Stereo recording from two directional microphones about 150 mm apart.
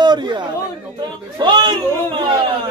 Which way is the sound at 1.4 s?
30° right (ahead or behind).